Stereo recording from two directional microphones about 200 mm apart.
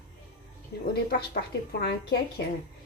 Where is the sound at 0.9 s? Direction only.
50° left (ahead or behind).